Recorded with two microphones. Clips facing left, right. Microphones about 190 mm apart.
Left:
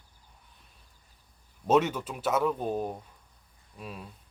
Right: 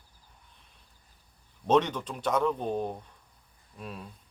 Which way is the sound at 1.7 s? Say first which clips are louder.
Even; 5° left (ahead or behind).